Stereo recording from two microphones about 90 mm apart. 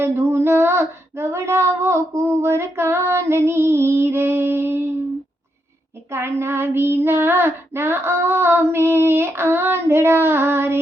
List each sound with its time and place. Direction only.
0.0 s female singing: 25° right (ahead or behind)
6.1 s female singing: 30° right (ahead or behind)